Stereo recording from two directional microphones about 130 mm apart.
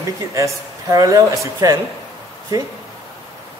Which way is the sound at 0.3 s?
25° right (ahead or behind).